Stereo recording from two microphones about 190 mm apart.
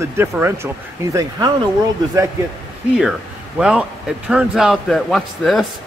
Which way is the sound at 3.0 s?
5° right (ahead or behind).